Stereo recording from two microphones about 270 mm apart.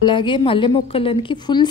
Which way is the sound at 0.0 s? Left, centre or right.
Centre.